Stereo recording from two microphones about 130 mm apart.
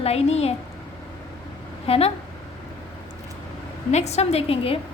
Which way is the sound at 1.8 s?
50° left (ahead or behind).